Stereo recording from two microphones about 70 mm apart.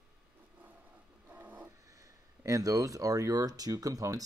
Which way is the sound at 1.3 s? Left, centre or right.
Right.